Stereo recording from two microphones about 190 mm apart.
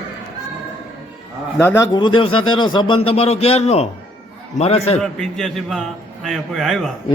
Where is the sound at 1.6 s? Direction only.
15° left (ahead or behind); by 5.0 s 35° left (ahead or behind).